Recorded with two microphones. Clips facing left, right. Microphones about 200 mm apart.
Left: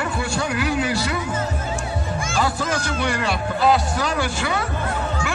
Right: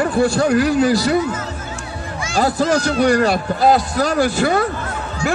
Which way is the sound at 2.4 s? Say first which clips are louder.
Right 8 dB; 40° right (ahead or behind).